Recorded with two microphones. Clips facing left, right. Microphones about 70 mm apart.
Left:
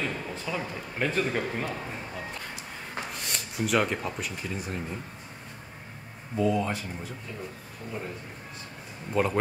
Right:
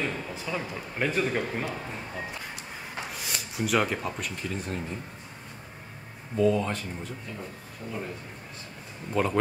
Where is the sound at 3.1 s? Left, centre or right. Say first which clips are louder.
Right 1 dB; centre.